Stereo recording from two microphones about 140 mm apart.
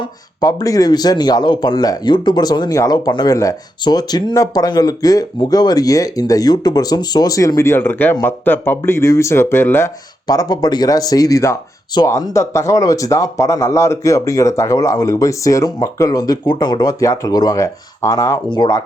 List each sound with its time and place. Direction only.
0.3 s speech: 25° left (ahead or behind)
10.2 s speech: 25° left (ahead or behind)